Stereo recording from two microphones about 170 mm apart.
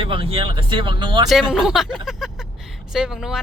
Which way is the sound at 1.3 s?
Centre (ahead or behind).